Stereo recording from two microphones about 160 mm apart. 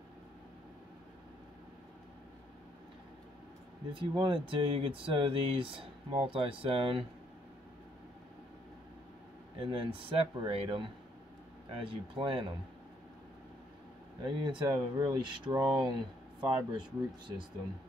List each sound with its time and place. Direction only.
3.9 s speech: 30° right (ahead or behind)
9.6 s speech: 35° right (ahead or behind)
14.2 s speech: 30° right (ahead or behind)